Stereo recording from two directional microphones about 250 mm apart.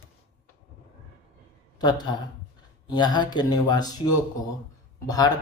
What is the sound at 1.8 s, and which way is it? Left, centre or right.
A man's voice, centre.